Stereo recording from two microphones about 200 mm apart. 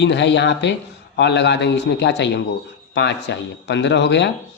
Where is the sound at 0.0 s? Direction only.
60° left (ahead or behind).